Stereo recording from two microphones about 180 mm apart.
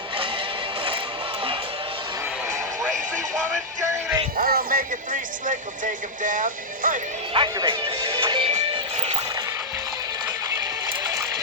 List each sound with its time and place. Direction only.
0.2 s music: 30° right (ahead or behind)
4.4 s speech: 55° right (ahead or behind)
7.3 s music: 25° right (ahead or behind)
11.0 s music: 20° right (ahead or behind)